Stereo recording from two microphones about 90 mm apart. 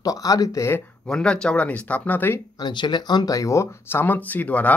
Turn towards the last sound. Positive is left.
turn(degrees=15)  # may be behind; listen again after turning